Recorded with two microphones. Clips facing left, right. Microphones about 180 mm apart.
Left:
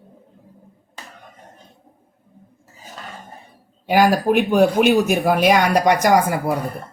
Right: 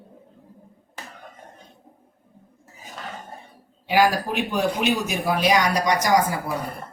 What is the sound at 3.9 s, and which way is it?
Speech, 50° left (ahead or behind).